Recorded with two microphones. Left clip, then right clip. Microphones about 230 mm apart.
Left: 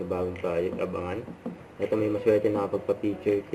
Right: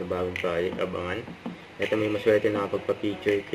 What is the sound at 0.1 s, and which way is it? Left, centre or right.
Speech, right.